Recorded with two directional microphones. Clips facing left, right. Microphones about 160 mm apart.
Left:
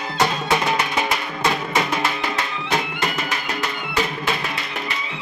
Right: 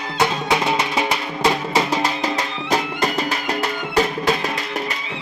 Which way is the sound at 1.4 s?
35° right (ahead or behind).